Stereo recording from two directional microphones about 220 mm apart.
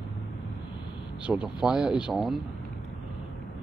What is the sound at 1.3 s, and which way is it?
A man's voice, 5° right (ahead or behind).